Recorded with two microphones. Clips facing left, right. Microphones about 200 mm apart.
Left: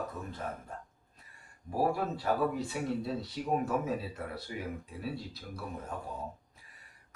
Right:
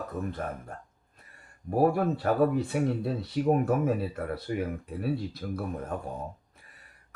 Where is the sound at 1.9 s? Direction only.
55° right (ahead or behind).